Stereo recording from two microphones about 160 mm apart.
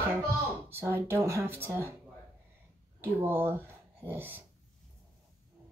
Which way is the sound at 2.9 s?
15° right (ahead or behind).